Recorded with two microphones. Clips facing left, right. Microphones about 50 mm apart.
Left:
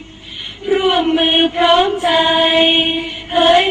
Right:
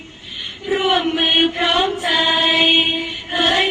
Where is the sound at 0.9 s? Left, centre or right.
Left.